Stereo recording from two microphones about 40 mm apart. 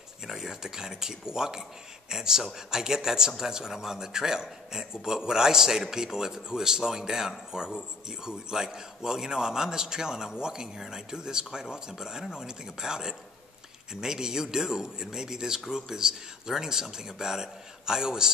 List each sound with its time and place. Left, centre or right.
0.3 s a man's voice: centre